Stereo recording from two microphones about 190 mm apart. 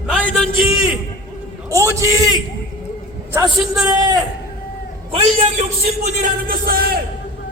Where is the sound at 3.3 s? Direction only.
20° right (ahead or behind).